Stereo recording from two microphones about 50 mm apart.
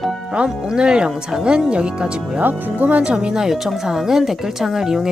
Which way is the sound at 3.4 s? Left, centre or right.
Centre.